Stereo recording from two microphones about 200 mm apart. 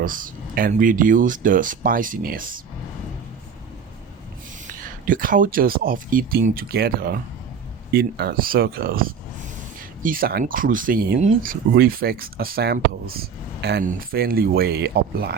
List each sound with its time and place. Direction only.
0.0 s speech: 45° right (ahead or behind)
4.6 s speech: 45° right (ahead or behind)